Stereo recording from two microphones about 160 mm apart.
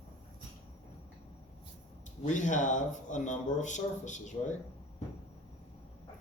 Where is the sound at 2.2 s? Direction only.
50° left (ahead or behind).